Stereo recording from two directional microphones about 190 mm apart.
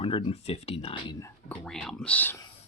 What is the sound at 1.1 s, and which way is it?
Speech, 15° left (ahead or behind).